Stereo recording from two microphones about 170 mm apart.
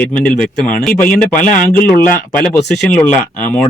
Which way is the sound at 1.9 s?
25° right (ahead or behind).